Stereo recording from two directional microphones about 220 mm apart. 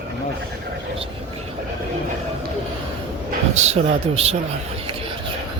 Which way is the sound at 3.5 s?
30° right (ahead or behind).